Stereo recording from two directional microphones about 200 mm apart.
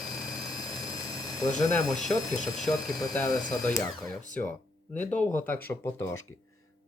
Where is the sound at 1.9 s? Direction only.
Centre (ahead or behind).